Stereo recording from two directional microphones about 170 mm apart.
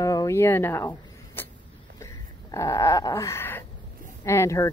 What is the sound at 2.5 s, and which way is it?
Dog, 20° left (ahead or behind).